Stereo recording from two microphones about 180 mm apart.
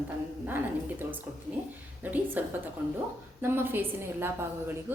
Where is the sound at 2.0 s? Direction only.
10° right (ahead or behind).